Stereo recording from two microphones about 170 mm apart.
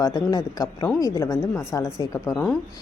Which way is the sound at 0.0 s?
20° left (ahead or behind).